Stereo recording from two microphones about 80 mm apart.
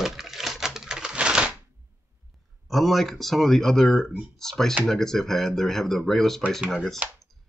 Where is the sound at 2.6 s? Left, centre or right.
Centre.